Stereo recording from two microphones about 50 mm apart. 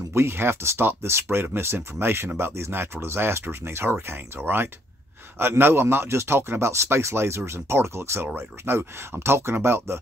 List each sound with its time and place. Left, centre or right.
0.1 s speech: right
5.4 s speech: right